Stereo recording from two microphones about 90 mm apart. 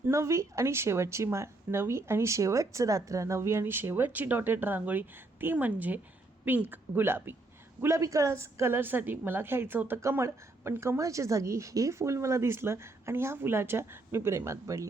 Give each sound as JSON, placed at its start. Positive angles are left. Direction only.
{"t": 0.1, "sound": "a woman's voice", "side_deg": -35}